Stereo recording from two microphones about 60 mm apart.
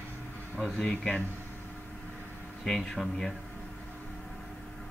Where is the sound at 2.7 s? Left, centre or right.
Centre.